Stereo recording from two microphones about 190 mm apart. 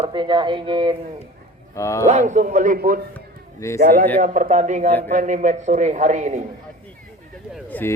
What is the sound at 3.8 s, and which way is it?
A man's voice, 45° right (ahead or behind).